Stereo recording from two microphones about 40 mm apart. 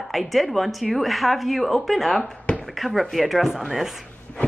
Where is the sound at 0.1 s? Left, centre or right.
Centre.